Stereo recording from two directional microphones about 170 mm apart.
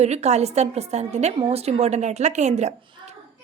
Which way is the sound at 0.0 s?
40° right (ahead or behind).